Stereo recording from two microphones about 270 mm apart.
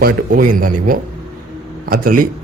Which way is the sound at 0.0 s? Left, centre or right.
Right.